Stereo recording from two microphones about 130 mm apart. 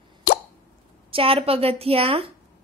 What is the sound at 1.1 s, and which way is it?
A woman's voice, 45° right (ahead or behind).